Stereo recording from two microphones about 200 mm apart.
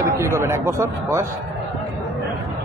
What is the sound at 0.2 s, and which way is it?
Speech, 15° right (ahead or behind).